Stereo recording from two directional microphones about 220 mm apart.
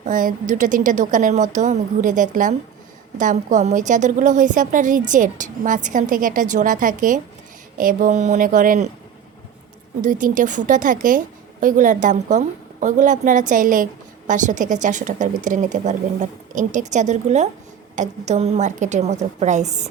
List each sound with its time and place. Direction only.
0.0 s a woman's voice: 35° right (ahead or behind)
10.0 s a woman's voice: 35° right (ahead or behind)